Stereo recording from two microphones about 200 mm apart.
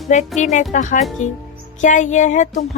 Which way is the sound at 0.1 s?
35° left (ahead or behind).